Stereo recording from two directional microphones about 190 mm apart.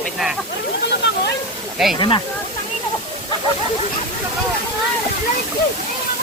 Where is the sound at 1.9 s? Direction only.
25° left (ahead or behind).